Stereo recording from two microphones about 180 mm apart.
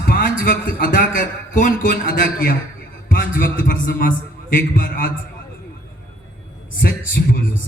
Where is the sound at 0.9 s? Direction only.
45° left (ahead or behind).